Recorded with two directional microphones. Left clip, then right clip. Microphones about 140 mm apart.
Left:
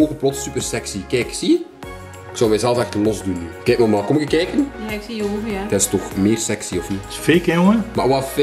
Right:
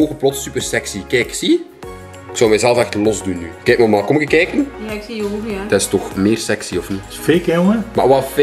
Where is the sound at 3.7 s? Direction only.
30° right (ahead or behind).